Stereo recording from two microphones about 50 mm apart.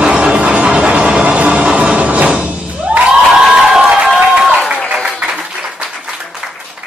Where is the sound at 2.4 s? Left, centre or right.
Right.